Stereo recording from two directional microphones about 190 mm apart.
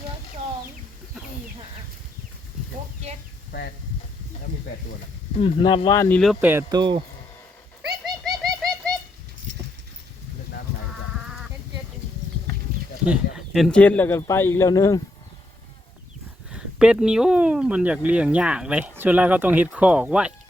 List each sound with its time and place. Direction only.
5.4 s speech: 30° left (ahead or behind)
6.0 s speech: 5° left (ahead or behind)
6.4 s speech: 10° right (ahead or behind)
7.8 s pigeon: centre (ahead or behind)
13.1 s speech: centre (ahead or behind); by 15.0 s 20° left (ahead or behind)
16.5 s speech: 5° right (ahead or behind)